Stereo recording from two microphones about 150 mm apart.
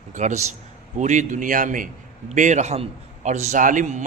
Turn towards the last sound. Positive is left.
turn(degrees=-55)  # may be behind; listen again after turning